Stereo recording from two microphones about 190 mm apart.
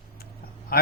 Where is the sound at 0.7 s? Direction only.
50° left (ahead or behind).